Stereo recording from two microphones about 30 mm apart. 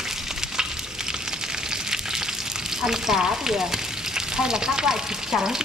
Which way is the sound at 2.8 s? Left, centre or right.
Centre.